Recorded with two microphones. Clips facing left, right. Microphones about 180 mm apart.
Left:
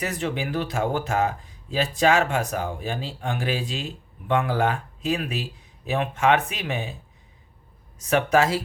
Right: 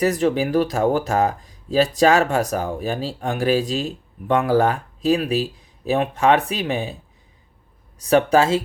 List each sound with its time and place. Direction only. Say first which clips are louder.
0.0 s speech: right 9 dB; 40° right (ahead or behind)
7.9 s speech: right 4 dB; 35° right (ahead or behind)